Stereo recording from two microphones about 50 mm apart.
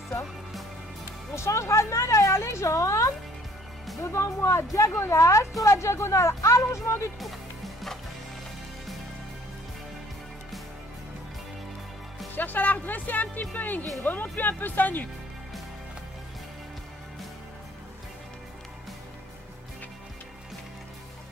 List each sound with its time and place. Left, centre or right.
1.3 s speech: left
4.0 s speech: left
5.0 s a woman's voice: left
5.7 s speech: left
7.2 s music: centre
12.4 s speech: left